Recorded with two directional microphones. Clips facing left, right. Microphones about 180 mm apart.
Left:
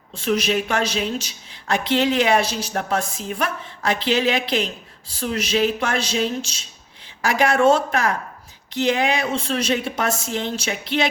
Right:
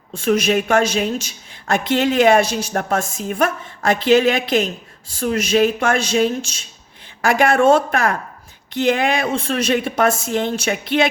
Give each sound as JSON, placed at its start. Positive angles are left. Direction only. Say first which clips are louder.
{"t": 0.1, "sound": "a woman's voice", "louder": "right 4 dB", "side_deg": -50}